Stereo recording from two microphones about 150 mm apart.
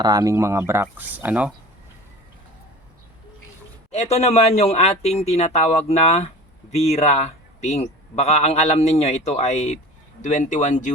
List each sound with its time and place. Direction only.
0.0 s speech: 25° right (ahead or behind)
3.9 s speech: 45° left (ahead or behind)